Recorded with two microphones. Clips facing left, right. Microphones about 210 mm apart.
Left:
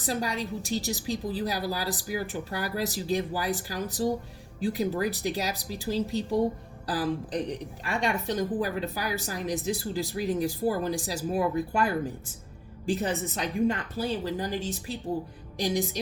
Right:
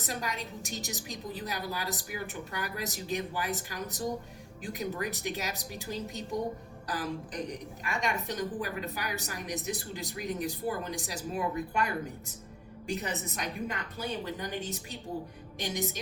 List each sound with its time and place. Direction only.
0.0 s a woman's voice: 35° left (ahead or behind)